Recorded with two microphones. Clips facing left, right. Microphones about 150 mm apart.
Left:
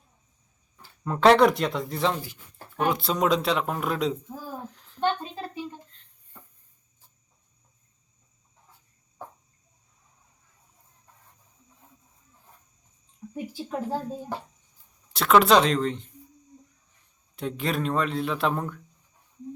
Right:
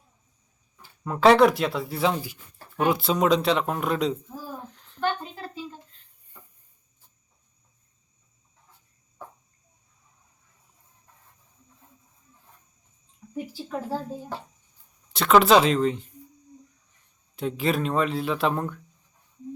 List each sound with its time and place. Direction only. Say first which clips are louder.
0.8 s speech: right 1 dB; 5° right (ahead or behind)
4.6 s a sound: left 3 dB; centre (ahead or behind)
4.9 s a sound: left 1 dB; 20° left (ahead or behind)
13.3 s speech: even; 15° left (ahead or behind)
15.1 s speech: right 1 dB; centre (ahead or behind)
17.3 s speech: right 3 dB; centre (ahead or behind)